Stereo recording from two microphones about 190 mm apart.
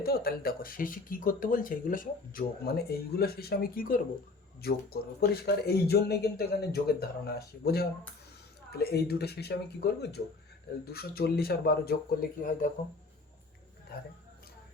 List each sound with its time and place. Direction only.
0.0 s speech: 55° left (ahead or behind)